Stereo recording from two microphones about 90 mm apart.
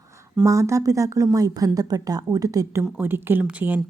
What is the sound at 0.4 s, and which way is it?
Speech, 35° right (ahead or behind).